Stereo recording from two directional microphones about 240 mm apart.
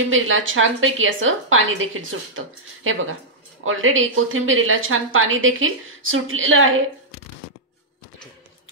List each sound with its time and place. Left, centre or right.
0.1 s a woman's voice: right